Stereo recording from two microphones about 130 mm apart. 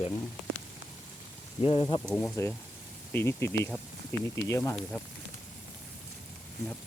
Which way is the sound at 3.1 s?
20° left (ahead or behind).